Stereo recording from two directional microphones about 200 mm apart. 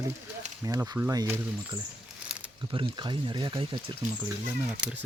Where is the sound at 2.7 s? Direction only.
25° right (ahead or behind).